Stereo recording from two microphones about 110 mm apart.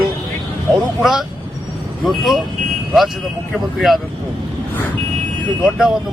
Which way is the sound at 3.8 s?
Centre (ahead or behind).